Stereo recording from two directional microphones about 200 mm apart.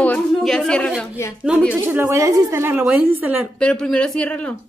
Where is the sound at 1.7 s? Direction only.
10° right (ahead or behind).